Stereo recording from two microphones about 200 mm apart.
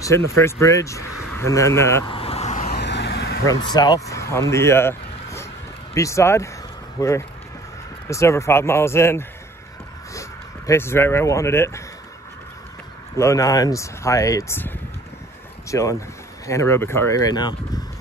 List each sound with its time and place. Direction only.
0.0 s speech: 15° left (ahead or behind)
2.0 s vehicle: 30° left (ahead or behind)
2.8 s vehicle: 60° left (ahead or behind)
3.4 s speech: 20° left (ahead or behind)
10.7 s speech: 10° left (ahead or behind)
13.1 s speech: 15° left (ahead or behind)
15.7 s speech: 15° left (ahead or behind)